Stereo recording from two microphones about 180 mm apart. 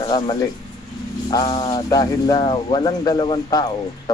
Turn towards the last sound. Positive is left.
turn(degrees=25)  # may be behind; listen again after turning